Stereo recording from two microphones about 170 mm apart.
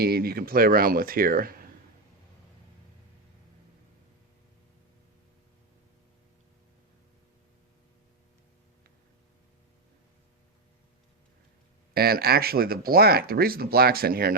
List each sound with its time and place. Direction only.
0.0 s speech: 65° right (ahead or behind)
11.9 s speech: 65° right (ahead or behind)